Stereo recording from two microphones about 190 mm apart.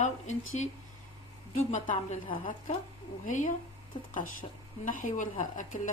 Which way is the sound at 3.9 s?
25° left (ahead or behind).